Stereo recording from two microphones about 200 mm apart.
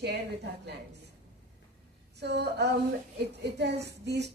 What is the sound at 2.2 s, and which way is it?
A woman's voice, 55° right (ahead or behind).